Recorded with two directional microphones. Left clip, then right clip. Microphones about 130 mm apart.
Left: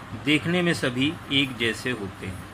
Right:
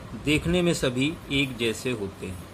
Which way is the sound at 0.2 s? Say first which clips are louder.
Left 1 dB; 20° right (ahead or behind).